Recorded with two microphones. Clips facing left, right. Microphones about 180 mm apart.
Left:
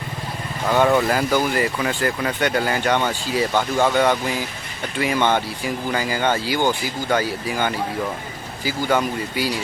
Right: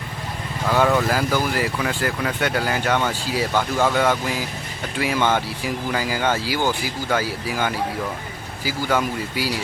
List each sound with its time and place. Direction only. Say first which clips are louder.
0.7 s speech: left 2 dB; centre (ahead or behind)
3.5 s speech: even; 15° left (ahead or behind)
3.9 s speech: left 2 dB; 5° right (ahead or behind)